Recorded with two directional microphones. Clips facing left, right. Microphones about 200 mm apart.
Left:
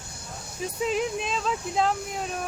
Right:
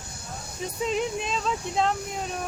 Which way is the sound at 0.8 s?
Centre (ahead or behind).